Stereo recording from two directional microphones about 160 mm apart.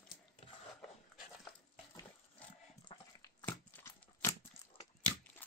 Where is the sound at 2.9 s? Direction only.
35° left (ahead or behind).